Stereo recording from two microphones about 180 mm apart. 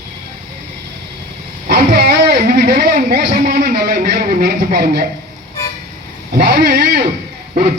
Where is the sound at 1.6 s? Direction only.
55° right (ahead or behind).